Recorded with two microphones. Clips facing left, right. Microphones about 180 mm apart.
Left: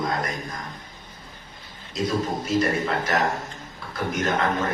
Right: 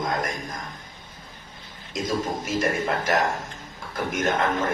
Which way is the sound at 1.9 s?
45° right (ahead or behind).